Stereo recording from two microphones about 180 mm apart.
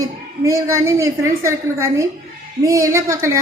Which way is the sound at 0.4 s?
15° right (ahead or behind).